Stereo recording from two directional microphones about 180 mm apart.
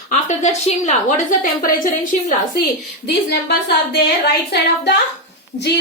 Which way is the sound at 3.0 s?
65° left (ahead or behind).